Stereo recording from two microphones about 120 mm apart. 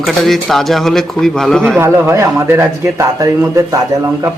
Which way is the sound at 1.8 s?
20° right (ahead or behind).